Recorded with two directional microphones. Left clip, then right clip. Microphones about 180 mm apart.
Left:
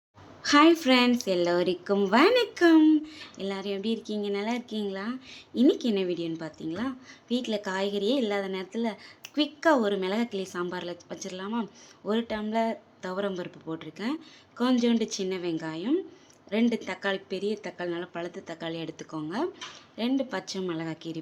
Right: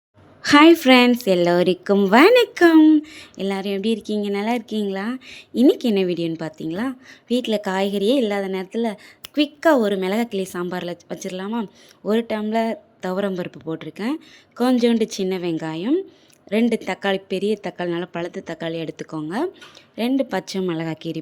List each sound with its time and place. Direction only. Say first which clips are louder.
0.4 s a woman's voice: right 8 dB; 40° right (ahead or behind)